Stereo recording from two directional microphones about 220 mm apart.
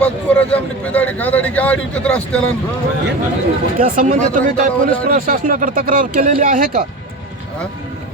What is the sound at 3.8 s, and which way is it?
Speech, 40° right (ahead or behind).